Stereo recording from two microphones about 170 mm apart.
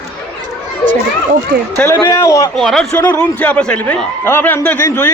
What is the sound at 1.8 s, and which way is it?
Speech, 15° left (ahead or behind).